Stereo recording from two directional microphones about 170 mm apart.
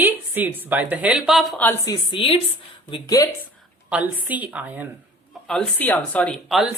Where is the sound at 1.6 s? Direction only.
20° left (ahead or behind).